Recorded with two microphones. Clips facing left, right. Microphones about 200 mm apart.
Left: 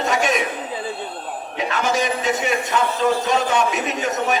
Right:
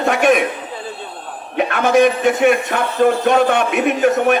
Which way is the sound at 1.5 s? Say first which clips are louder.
Right 8 dB; 60° right (ahead or behind).